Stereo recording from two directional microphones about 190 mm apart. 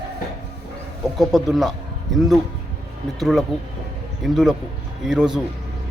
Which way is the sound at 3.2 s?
Centre (ahead or behind).